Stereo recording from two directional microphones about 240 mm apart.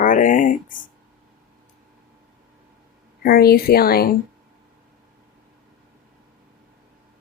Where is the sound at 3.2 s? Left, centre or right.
Left.